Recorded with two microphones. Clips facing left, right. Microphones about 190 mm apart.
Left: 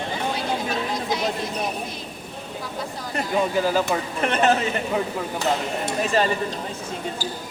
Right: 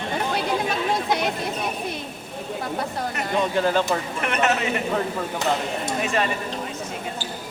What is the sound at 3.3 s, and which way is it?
Speech, 5° left (ahead or behind).